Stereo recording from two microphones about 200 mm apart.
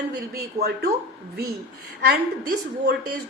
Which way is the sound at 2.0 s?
50° right (ahead or behind).